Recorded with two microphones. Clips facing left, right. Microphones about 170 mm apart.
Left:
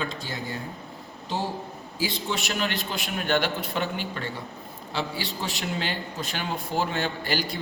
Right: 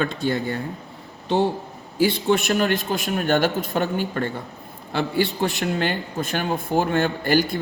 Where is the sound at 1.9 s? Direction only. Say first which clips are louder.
Right 10 dB; 60° right (ahead or behind).